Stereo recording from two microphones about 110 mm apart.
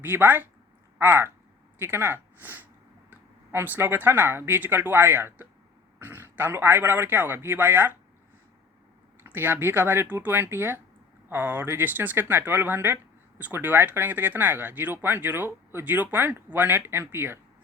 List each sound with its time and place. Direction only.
0.0 s speech: 20° right (ahead or behind)
9.2 s speech: 20° right (ahead or behind)